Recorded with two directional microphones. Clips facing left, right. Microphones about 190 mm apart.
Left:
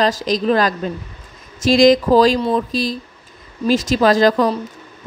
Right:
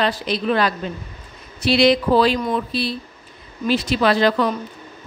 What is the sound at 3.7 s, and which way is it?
Speech, 40° left (ahead or behind).